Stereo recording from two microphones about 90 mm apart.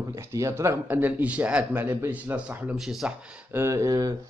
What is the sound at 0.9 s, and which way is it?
Speech, 20° right (ahead or behind).